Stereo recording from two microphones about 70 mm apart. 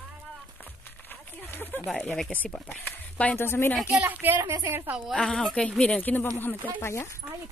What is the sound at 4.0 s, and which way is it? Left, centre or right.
Speech, right.